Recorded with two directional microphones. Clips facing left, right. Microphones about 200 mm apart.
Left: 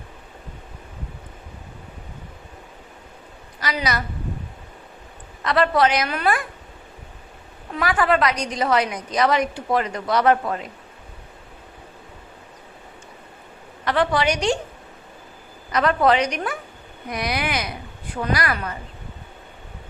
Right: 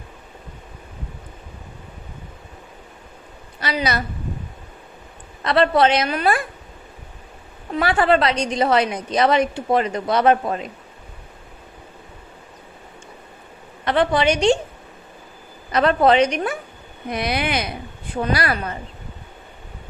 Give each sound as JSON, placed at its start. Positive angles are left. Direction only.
{"t": 3.6, "sound": "a woman's voice", "side_deg": -25}
{"t": 5.4, "sound": "a woman's voice", "side_deg": -30}
{"t": 7.8, "sound": "a woman's voice", "side_deg": -30}
{"t": 13.8, "sound": "a woman's voice", "side_deg": -25}
{"t": 15.7, "sound": "a woman's voice", "side_deg": -25}